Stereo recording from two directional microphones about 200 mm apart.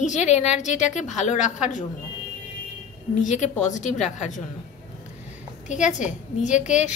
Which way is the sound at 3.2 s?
35° left (ahead or behind).